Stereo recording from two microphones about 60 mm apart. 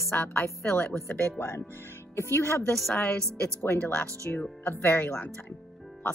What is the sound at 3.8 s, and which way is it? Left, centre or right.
Speech, left.